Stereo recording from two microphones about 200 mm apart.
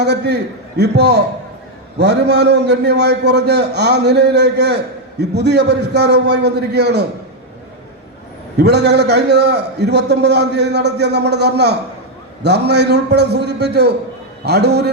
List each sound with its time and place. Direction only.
0.0 s a man's voice: 55° right (ahead or behind)
8.5 s a man's voice: 55° right (ahead or behind)